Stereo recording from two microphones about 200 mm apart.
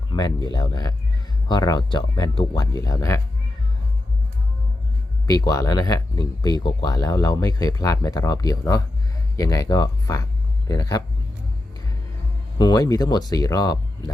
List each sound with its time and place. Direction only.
0.1 s a sound: 20° left (ahead or behind)
0.4 s speech: 20° left (ahead or behind)
5.2 s speech: 15° left (ahead or behind)
12.5 s speech: 20° left (ahead or behind)